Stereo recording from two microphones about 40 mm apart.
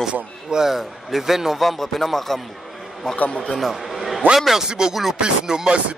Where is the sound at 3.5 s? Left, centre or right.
Centre.